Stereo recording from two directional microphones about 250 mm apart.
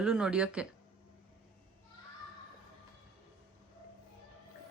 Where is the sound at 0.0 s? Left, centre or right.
Centre.